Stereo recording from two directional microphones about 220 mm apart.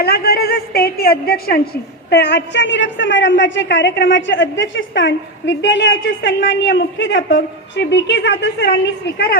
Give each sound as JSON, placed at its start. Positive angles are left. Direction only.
{"t": 0.0, "sound": "a woman's voice", "side_deg": 45}